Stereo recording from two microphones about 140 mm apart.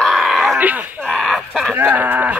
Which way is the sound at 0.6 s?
10° right (ahead or behind).